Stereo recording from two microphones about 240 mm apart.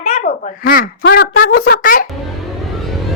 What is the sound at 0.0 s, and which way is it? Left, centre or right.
A child's voice, left.